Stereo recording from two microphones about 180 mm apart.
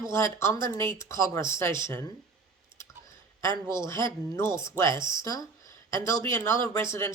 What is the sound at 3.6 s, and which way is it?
Speech, 15° left (ahead or behind).